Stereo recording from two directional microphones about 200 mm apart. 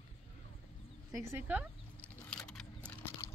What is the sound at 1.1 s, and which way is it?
Speech, 10° right (ahead or behind).